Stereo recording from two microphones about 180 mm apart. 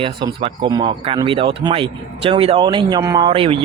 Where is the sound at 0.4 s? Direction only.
25° right (ahead or behind).